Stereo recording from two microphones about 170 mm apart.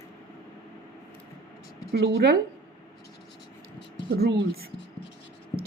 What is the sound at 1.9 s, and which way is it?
Speech, 70° right (ahead or behind).